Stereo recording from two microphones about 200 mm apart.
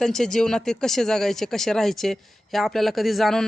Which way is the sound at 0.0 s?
Centre (ahead or behind).